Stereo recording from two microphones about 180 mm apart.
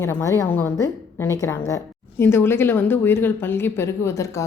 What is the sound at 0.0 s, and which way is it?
A woman's voice, 15° left (ahead or behind).